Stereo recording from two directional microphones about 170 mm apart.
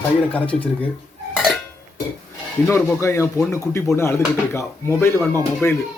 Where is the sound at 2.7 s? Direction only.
15° left (ahead or behind).